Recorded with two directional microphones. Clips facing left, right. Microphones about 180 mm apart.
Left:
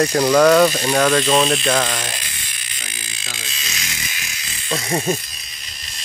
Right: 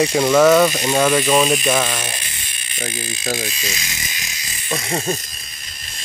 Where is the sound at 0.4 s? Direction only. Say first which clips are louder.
Even; 5° right (ahead or behind).